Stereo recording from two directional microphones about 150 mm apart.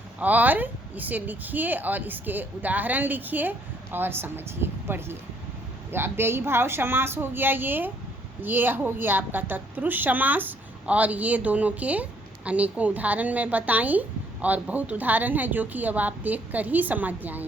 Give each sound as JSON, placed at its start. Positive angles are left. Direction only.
{"t": 0.2, "sound": "a woman's voice", "side_deg": -10}